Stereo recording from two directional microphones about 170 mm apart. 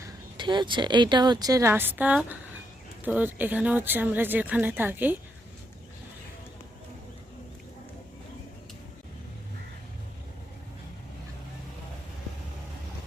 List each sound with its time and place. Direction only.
0.0 s speech: 25° right (ahead or behind); by 5.1 s 10° right (ahead or behind)